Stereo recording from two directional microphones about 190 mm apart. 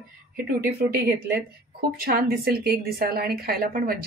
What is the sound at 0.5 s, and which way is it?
A woman's voice, 55° right (ahead or behind).